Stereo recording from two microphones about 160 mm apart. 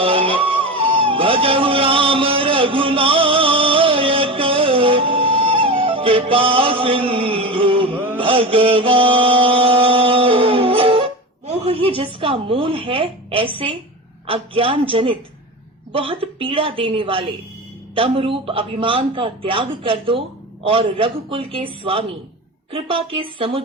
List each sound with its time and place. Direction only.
0.0 s music: 35° right (ahead or behind)
8.0 s mantra: 35° right (ahead or behind)
14.3 s a man's voice: 35° right (ahead or behind)